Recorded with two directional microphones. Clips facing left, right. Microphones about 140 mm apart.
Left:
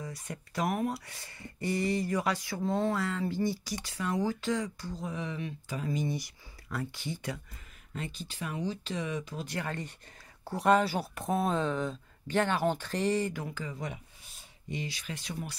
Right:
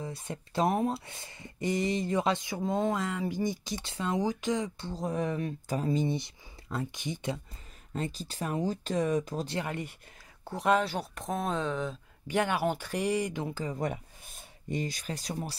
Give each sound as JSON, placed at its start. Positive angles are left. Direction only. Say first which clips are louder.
{"t": 0.0, "sound": "speech", "louder": "right 3 dB", "side_deg": -25}
{"t": 5.0, "sound": "speech", "louder": "right 6 dB", "side_deg": -45}
{"t": 5.9, "sound": "speech", "louder": "right 3 dB", "side_deg": -25}
{"t": 7.9, "sound": "speech", "louder": "right 5 dB", "side_deg": -35}
{"t": 9.5, "sound": "speech", "louder": "right 2 dB", "side_deg": -15}
{"t": 10.4, "sound": "speech", "louder": "left 1 dB", "side_deg": 0}
{"t": 12.3, "sound": "speech", "louder": "even", "side_deg": -10}
{"t": 13.7, "sound": "speech", "louder": "right 6 dB", "side_deg": -50}